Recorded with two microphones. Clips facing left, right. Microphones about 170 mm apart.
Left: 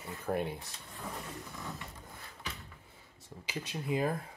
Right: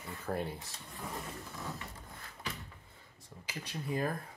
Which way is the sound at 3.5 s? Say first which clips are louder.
Left 3 dB; 20° left (ahead or behind).